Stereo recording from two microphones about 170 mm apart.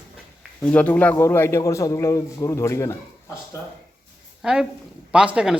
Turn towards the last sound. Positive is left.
turn(degrees=-5)  # may be behind; listen again after turning